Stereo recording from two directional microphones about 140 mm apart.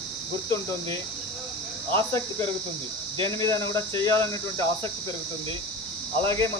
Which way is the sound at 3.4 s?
25° left (ahead or behind).